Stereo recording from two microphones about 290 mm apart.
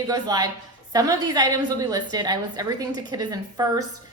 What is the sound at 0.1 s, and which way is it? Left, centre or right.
A woman's voice, centre.